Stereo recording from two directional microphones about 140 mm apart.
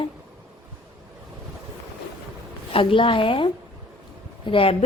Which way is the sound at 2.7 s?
40° left (ahead or behind).